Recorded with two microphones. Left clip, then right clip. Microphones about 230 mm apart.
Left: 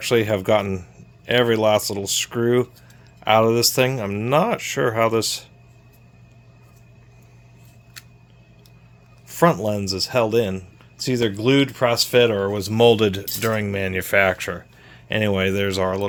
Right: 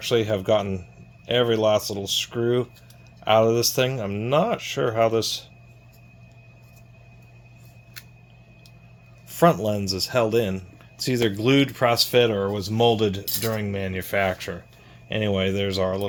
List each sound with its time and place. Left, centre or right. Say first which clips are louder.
0.0 s speech: left 3 dB; left
9.2 s speech: left 1 dB; centre